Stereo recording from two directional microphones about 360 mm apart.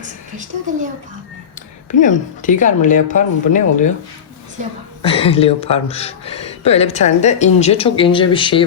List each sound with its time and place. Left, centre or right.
2.0 s speech: left
4.6 s a woman's voice: centre
5.0 s speech: centre